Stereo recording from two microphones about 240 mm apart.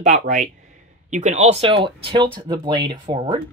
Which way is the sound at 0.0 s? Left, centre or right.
Right.